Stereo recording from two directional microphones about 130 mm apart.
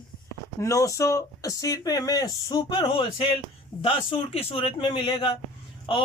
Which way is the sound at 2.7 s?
45° left (ahead or behind).